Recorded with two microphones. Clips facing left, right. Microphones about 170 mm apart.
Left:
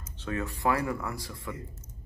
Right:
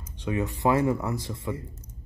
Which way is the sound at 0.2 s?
15° right (ahead or behind).